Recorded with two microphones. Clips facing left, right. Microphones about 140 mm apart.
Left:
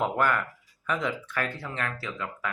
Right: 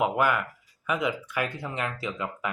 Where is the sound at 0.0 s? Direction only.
10° right (ahead or behind).